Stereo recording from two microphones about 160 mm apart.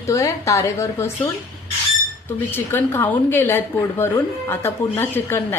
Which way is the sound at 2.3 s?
10° left (ahead or behind).